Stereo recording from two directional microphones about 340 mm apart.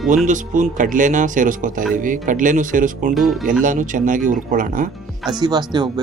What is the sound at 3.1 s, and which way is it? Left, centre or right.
Speech, centre.